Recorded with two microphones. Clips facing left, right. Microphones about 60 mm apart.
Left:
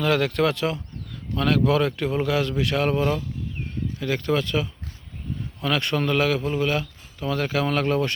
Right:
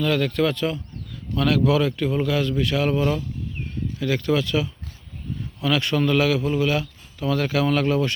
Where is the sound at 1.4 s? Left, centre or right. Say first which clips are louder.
Right 1 dB; left.